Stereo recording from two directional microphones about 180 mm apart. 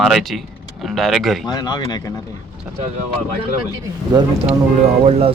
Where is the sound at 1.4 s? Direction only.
20° left (ahead or behind).